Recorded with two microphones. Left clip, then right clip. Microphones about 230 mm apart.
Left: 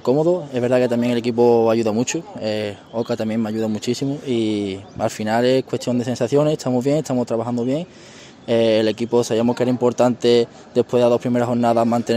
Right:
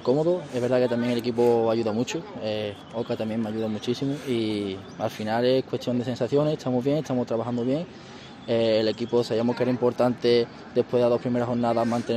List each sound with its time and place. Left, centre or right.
0.0 s speech: left